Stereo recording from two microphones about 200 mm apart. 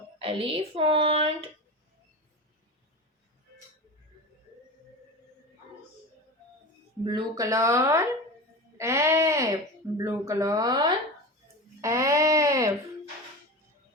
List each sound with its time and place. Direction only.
0.2 s speech: 30° right (ahead or behind)
7.0 s speech: 20° right (ahead or behind)